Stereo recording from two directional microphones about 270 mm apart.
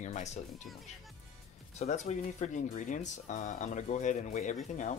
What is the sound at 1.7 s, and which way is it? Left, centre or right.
Speech, left.